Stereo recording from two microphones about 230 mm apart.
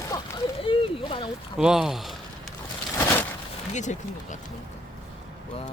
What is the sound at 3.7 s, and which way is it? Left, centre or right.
Speech, left.